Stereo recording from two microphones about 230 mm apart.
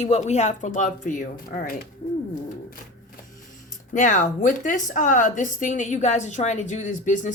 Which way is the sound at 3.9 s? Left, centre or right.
Left.